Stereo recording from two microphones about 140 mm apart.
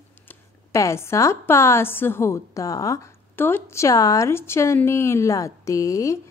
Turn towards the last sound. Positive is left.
turn(degrees=25)  # may be behind; listen again after turning